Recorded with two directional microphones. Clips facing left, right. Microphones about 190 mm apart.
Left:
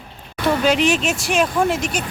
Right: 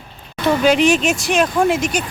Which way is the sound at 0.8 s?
45° right (ahead or behind).